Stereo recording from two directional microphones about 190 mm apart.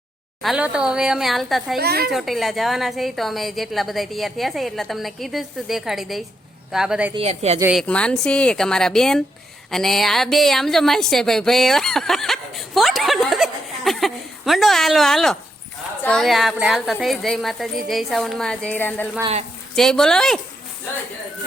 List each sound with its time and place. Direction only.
0.4 s a woman's voice: 5° right (ahead or behind)
1.8 s a woman's voice: 55° right (ahead or behind)
2.0 s a woman's voice: centre (ahead or behind)
7.1 s speech: 35° right (ahead or behind)
7.7 s a woman's voice: 5° left (ahead or behind)
19.2 s speech: 35° right (ahead or behind)
19.7 s a woman's voice: centre (ahead or behind)